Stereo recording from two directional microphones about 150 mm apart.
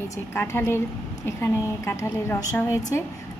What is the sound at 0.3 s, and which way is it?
A woman's voice, 15° left (ahead or behind).